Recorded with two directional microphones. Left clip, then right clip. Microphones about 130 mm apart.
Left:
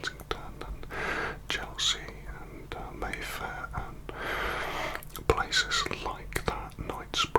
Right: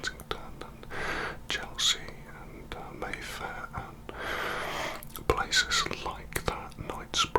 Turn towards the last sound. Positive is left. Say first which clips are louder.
# even
turn(degrees=30)  # may be behind; listen again after turning